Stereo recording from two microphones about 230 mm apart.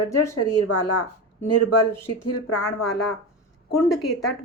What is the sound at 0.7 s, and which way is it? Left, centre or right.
Speech, left.